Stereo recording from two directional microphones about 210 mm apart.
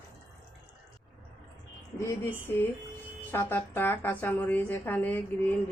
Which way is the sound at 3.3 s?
10° left (ahead or behind).